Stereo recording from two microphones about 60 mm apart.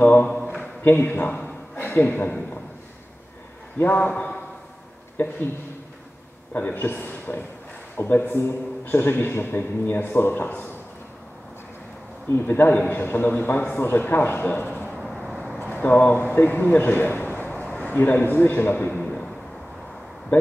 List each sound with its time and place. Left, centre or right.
0.0 s a man's voice: left
0.3 s a sound: centre
0.8 s a man's voice: left
1.8 s a sound: left
2.0 s a man's voice: left
3.7 s a man's voice: left
5.1 s speech: left
6.5 s a man's voice: left
12.3 s a man's voice: left
15.0 s vehicle: centre
15.6 s a man's voice: left
18.9 s a sound: centre